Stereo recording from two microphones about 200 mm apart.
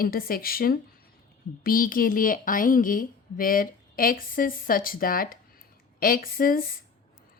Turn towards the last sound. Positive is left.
turn(degrees=45)  # may be behind; listen again after turning